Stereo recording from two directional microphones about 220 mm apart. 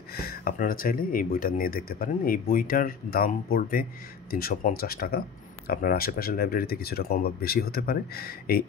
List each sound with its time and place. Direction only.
0.1 s speech: 45° left (ahead or behind)